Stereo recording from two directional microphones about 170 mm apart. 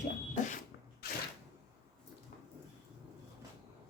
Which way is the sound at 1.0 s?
65° left (ahead or behind).